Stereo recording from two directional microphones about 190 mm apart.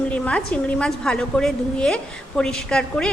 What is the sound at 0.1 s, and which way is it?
A woman's voice, 5° left (ahead or behind).